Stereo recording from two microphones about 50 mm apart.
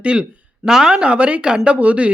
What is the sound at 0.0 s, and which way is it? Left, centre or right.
Speech, right.